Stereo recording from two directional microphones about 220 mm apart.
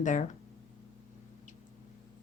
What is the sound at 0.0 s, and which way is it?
Speech, 35° left (ahead or behind).